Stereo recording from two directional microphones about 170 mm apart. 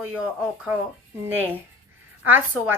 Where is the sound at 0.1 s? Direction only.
10° right (ahead or behind).